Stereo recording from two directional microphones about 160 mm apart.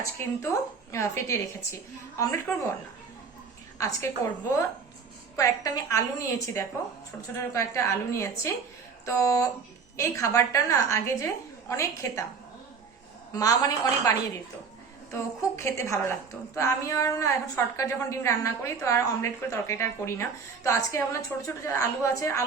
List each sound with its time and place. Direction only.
0.0 s a woman's voice: 20° left (ahead or behind)
2.1 s a woman's voice: 20° left (ahead or behind)
3.8 s a woman's voice: 20° left (ahead or behind)
13.3 s a woman's voice: 25° left (ahead or behind)